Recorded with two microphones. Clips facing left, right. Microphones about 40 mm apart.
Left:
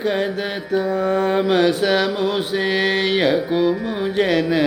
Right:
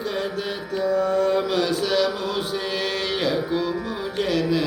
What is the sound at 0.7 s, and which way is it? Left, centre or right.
Music, left.